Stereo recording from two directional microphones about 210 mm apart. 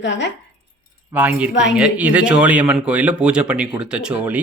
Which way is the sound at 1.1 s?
5° right (ahead or behind).